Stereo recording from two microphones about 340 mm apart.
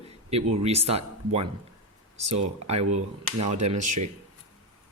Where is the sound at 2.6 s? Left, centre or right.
Centre.